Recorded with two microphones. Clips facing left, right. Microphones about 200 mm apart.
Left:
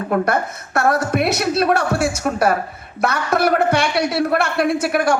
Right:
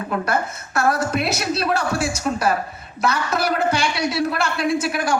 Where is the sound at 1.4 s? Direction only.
55° left (ahead or behind).